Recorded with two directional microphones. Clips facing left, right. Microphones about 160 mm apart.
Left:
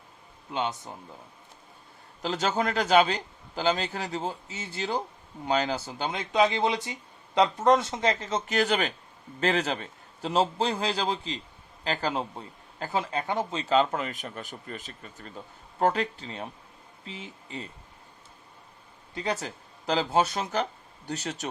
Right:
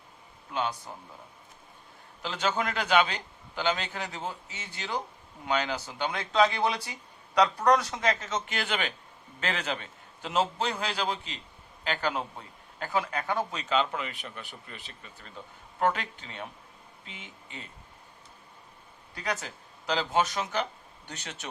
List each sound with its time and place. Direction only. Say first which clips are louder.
0.5 s a man's voice: left 1 dB; 25° left (ahead or behind)
2.2 s a man's voice: left 3 dB; 35° left (ahead or behind)
6.1 s a man's voice: left 1 dB; 20° left (ahead or behind)
19.1 s a man's voice: left 3 dB; 30° left (ahead or behind)